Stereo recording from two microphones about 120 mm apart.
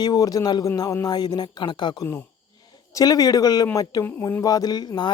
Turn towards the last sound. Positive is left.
turn(degrees=35)  # may be behind; listen again after turning